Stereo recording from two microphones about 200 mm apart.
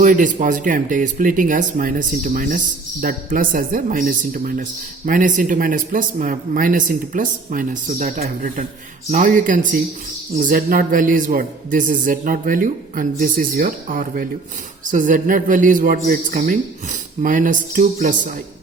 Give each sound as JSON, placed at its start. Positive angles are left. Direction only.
{"t": 0.0, "sound": "a man's voice", "side_deg": -40}